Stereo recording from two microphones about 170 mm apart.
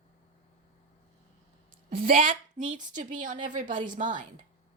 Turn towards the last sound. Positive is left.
turn(degrees=-50)  # may be behind; listen again after turning